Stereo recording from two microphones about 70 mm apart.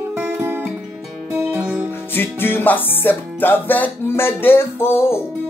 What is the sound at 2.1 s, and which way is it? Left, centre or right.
Music, left.